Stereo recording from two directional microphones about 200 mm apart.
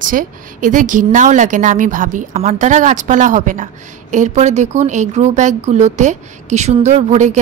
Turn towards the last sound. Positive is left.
turn(degrees=-35)  # may be behind; listen again after turning